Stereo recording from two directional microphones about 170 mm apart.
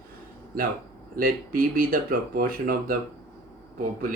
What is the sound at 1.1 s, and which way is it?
Speech, 55° right (ahead or behind).